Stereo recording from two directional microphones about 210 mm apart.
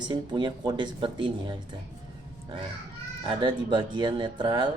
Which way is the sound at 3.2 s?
20° right (ahead or behind).